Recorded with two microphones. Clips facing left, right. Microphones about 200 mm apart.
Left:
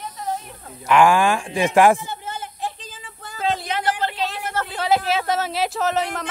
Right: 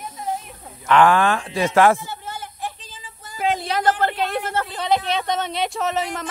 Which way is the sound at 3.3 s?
15° right (ahead or behind).